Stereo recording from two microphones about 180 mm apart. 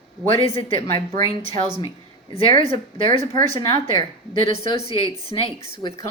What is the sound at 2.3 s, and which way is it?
Speech, 35° left (ahead or behind).